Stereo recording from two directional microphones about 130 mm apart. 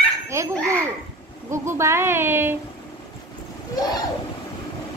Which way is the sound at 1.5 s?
20° right (ahead or behind).